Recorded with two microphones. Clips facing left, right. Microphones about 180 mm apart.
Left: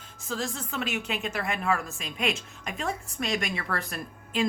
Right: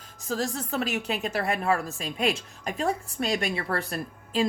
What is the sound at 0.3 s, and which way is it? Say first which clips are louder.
A woman's voice: right 4 dB; 40° right (ahead or behind).